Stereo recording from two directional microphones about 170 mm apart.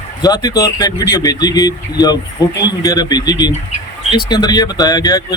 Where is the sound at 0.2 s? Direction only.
25° left (ahead or behind).